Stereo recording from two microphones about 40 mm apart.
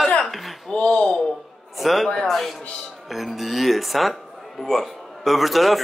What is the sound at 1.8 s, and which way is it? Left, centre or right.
A man's voice, centre.